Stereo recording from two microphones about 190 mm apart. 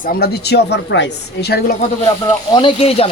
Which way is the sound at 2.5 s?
25° left (ahead or behind).